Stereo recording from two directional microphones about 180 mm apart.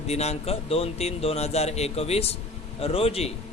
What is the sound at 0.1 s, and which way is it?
Speech, 35° left (ahead or behind).